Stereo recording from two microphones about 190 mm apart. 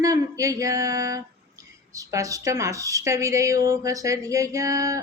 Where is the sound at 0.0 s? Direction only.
15° right (ahead or behind).